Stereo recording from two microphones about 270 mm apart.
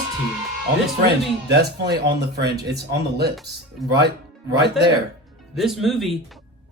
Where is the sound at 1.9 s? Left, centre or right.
Right.